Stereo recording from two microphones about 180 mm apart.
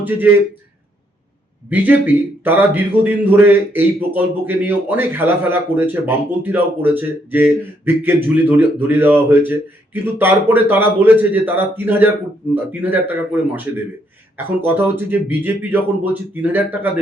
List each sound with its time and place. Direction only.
0.0 s speech: 10° right (ahead or behind)
1.7 s speech: 10° right (ahead or behind)